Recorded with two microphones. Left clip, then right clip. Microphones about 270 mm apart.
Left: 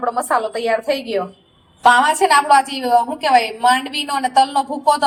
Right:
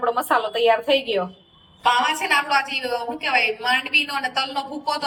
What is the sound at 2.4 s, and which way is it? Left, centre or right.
A woman's voice, centre.